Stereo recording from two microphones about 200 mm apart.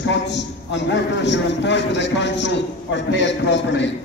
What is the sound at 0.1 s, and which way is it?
A man's voice, 60° left (ahead or behind).